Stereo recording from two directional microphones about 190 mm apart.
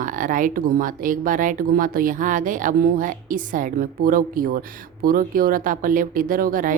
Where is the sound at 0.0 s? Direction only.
45° right (ahead or behind).